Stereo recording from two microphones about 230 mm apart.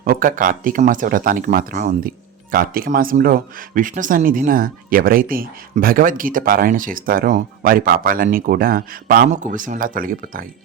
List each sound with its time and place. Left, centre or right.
0.0 s speech: right